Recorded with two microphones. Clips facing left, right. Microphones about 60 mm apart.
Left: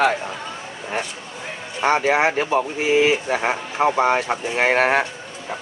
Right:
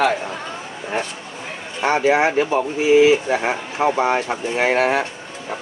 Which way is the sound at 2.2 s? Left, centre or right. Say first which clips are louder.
Right 2 dB; left.